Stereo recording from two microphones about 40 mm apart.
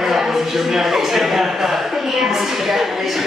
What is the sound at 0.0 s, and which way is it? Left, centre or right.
A man's voice, centre.